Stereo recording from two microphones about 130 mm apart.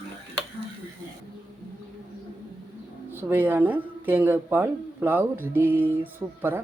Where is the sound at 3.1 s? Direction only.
15° right (ahead or behind).